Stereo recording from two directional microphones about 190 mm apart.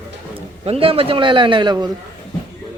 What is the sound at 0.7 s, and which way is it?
A man's voice, 30° right (ahead or behind).